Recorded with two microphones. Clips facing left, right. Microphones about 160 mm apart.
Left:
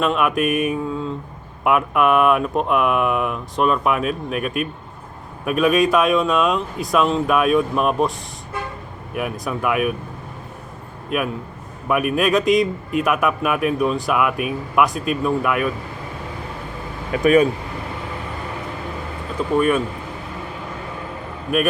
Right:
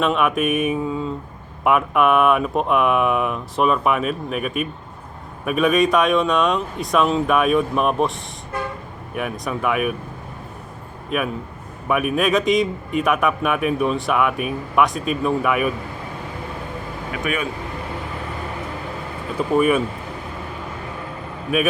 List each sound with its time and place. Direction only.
0.0 s speech: centre (ahead or behind)
9.1 s speech: centre (ahead or behind)
11.1 s speech: centre (ahead or behind)
17.2 s speech: 35° left (ahead or behind)
19.5 s speech: 5° right (ahead or behind)